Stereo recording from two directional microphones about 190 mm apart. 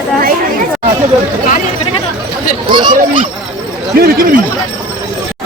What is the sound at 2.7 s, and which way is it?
Speech, 25° right (ahead or behind).